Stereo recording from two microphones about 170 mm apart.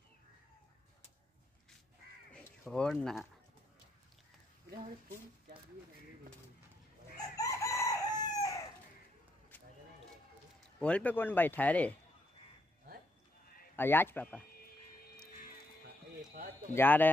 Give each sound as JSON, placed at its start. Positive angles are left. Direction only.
{"t": 2.7, "sound": "speech", "side_deg": 5}
{"t": 7.3, "sound": "chicken", "side_deg": 20}
{"t": 10.8, "sound": "speech", "side_deg": 5}
{"t": 13.7, "sound": "speech", "side_deg": 15}
{"t": 16.7, "sound": "speech", "side_deg": 10}